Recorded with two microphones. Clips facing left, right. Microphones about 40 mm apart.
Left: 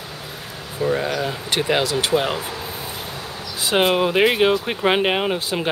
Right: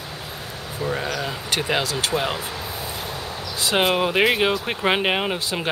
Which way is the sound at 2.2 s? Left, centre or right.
Centre.